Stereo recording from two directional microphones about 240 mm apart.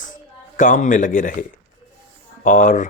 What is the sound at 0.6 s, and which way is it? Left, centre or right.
A man's voice, left.